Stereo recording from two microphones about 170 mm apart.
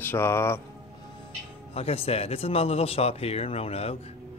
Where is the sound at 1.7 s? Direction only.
35° left (ahead or behind).